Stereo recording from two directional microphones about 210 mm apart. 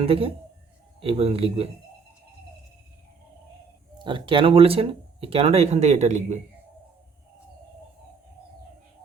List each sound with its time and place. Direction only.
0.0 s speech: 25° right (ahead or behind)
3.9 s speech: 20° right (ahead or behind)